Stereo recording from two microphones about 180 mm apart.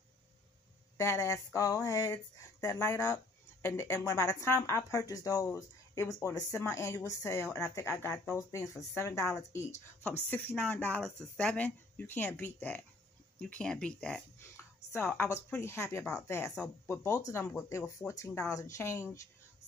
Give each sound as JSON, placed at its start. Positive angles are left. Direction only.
{"t": 0.9, "sound": "speech", "side_deg": 15}